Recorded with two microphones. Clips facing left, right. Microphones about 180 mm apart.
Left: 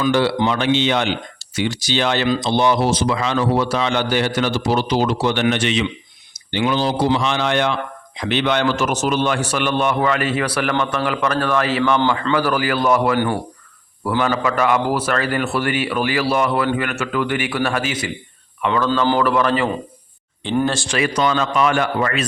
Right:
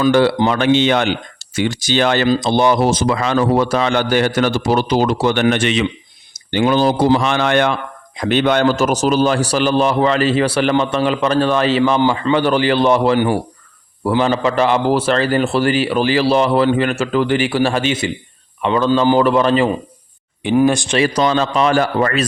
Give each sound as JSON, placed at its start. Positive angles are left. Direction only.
{"t": 0.0, "sound": "a man's voice", "side_deg": -50}
{"t": 20.4, "sound": "speech", "side_deg": -15}
{"t": 21.0, "sound": "a man's voice", "side_deg": -35}